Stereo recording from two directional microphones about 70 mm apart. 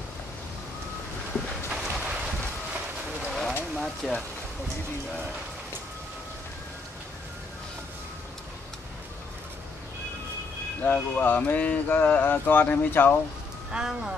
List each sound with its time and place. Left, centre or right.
1.7 s boat: centre
3.3 s a sound: centre
3.7 s speech: centre
10.8 s speech: left
13.7 s speech: centre